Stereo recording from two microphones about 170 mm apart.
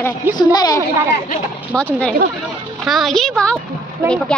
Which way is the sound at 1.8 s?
5° left (ahead or behind).